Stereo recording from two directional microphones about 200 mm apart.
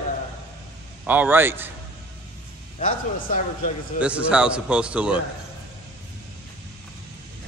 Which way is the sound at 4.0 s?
5° right (ahead or behind).